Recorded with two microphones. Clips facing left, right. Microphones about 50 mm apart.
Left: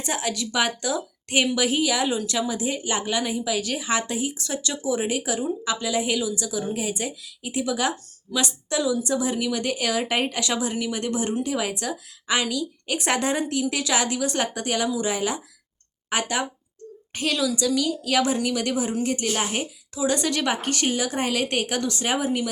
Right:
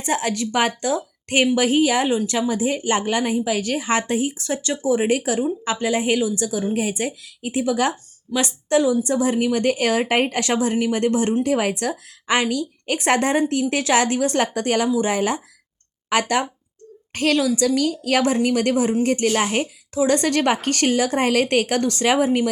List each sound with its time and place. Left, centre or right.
0.0 s a woman's voice: right